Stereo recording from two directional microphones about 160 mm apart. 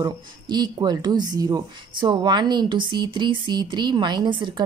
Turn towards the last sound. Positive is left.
turn(degrees=-30)  # may be behind; listen again after turning